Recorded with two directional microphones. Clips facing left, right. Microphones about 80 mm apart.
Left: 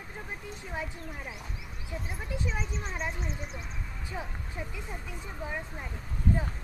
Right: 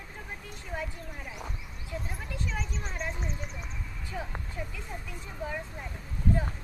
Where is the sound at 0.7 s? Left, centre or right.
Centre.